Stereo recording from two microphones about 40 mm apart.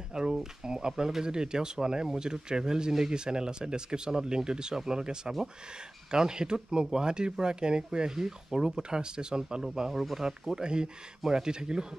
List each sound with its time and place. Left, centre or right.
0.1 s speech: centre
10.5 s speech: right